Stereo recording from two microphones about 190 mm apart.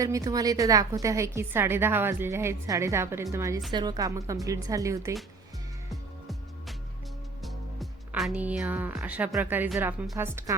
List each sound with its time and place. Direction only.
0.0 s a woman's voice: 20° right (ahead or behind)
5.9 s music: centre (ahead or behind)
7.4 s a woman's voice: centre (ahead or behind)